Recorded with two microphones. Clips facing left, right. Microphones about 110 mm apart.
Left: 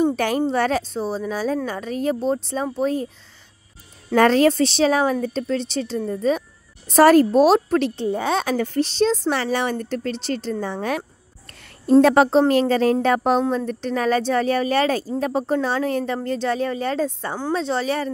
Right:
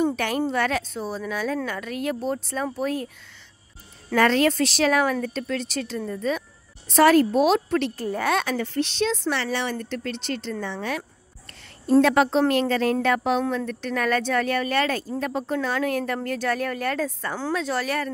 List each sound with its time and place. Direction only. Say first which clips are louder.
0.1 s speech: left 4 dB; 40° left (ahead or behind)
4.1 s speech: left 4 dB; 40° left (ahead or behind)
8.1 s speech: even; 25° left (ahead or behind)
8.5 s speech: left 4 dB; 40° left (ahead or behind)